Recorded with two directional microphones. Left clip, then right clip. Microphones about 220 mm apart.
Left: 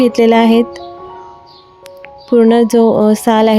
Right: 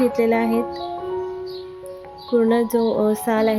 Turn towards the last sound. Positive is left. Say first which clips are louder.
# left 8 dB
turn(degrees=35)  # may be behind; listen again after turning